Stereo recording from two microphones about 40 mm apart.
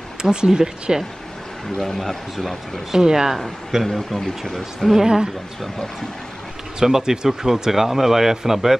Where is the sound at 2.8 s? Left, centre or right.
Centre.